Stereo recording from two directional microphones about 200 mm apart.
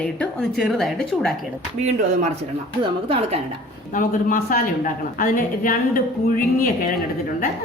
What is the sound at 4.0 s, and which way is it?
A woman's voice, 45° left (ahead or behind).